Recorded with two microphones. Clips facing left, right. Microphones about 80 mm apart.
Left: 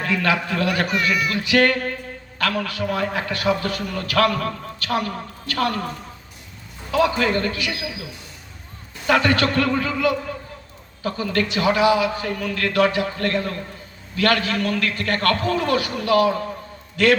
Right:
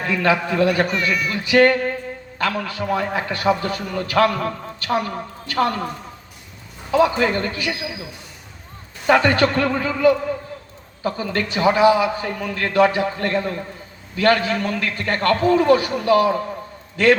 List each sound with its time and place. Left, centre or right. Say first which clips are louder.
0.0 s a man's voice: right 2 dB; right
6.9 s a man's voice: right 2 dB; right
9.0 s a man's voice: right 3 dB; right